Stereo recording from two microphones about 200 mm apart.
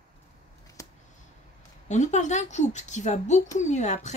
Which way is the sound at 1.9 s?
35° left (ahead or behind).